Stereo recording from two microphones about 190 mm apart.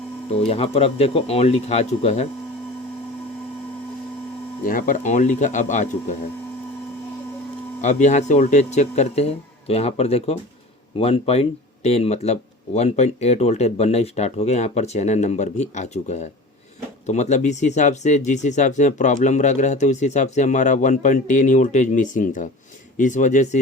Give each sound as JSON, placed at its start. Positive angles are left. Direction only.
{"t": 0.3, "sound": "speech", "side_deg": 30}
{"t": 4.6, "sound": "speech", "side_deg": 45}
{"t": 7.8, "sound": "speech", "side_deg": 40}